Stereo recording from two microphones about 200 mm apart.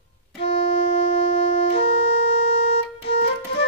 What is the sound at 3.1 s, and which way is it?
Music, 55° left (ahead or behind).